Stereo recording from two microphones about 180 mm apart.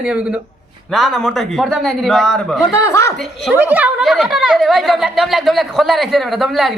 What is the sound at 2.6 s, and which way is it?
Speech, 15° left (ahead or behind).